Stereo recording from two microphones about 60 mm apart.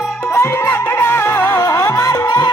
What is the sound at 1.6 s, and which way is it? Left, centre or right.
Music, left.